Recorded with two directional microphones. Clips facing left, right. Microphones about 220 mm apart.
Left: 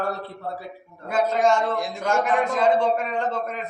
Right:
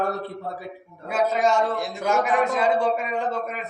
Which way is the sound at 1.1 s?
5° right (ahead or behind).